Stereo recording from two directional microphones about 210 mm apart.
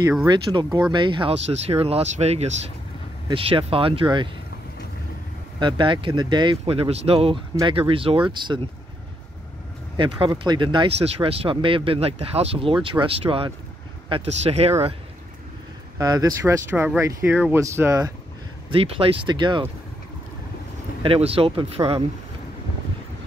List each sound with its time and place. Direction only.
0.3 s speech: 20° right (ahead or behind)
5.6 s speech: 25° right (ahead or behind)
9.9 s speech: 20° right (ahead or behind)
16.0 s speech: 20° right (ahead or behind)
18.7 s speech: 25° right (ahead or behind)
21.0 s speech: 25° right (ahead or behind)